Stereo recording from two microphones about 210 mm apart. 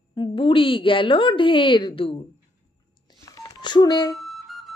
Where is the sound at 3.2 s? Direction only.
20° left (ahead or behind).